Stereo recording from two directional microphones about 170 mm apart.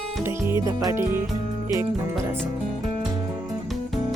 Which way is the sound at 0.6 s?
15° right (ahead or behind).